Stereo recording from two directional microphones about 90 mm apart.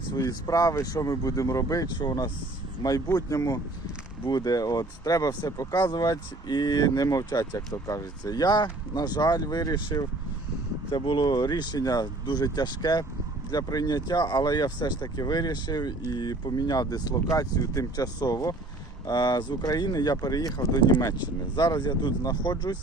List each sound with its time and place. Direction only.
0.2 s speech: 40° left (ahead or behind)
10.9 s speech: 60° left (ahead or behind)